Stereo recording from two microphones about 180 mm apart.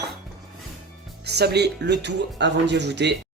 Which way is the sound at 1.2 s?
65° right (ahead or behind).